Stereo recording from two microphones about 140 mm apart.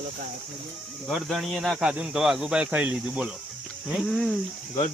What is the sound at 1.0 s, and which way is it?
Speech, centre (ahead or behind).